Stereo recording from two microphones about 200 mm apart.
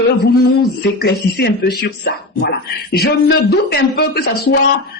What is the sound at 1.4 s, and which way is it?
Speech, 50° left (ahead or behind).